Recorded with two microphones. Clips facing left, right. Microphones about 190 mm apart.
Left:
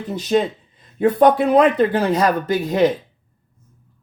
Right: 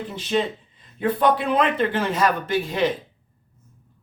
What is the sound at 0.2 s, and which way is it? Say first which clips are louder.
Speech: left 5 dB; 40° left (ahead or behind).